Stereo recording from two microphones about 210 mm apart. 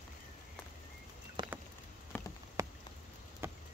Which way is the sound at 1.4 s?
20° right (ahead or behind).